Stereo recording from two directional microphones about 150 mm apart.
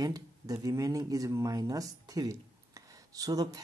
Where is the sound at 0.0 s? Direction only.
25° right (ahead or behind).